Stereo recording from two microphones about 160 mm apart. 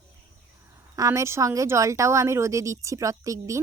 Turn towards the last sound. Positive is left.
turn(degrees=-20)  # may be behind; listen again after turning